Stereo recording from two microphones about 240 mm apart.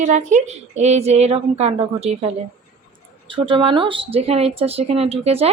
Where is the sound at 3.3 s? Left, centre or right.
Right.